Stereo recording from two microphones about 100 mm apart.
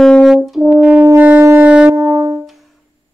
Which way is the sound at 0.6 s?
15° right (ahead or behind).